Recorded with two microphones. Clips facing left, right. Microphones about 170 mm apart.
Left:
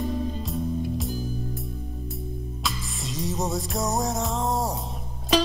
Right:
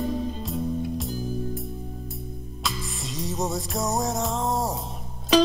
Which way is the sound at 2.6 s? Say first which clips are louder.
Right 2 dB; centre (ahead or behind).